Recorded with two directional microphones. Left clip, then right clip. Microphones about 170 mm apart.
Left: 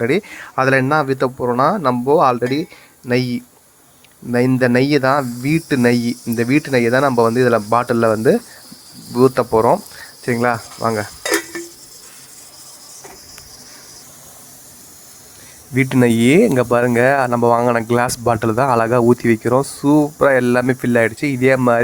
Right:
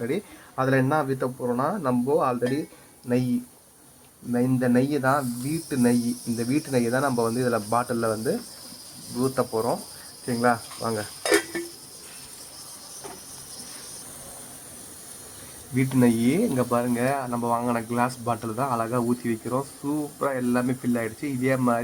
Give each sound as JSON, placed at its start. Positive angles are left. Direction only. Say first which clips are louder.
{"t": 0.0, "sound": "speech", "louder": "left 11 dB", "side_deg": 30}
{"t": 15.7, "sound": "speech", "louder": "left 8 dB", "side_deg": 30}